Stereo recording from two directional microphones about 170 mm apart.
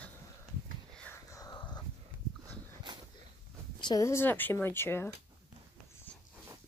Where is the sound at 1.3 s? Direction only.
20° left (ahead or behind).